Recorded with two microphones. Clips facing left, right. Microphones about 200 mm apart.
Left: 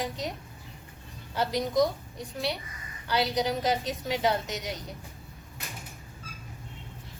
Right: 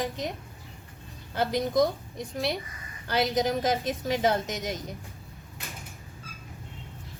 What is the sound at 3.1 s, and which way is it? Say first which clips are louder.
A woman's voice: right 2 dB; 50° right (ahead or behind).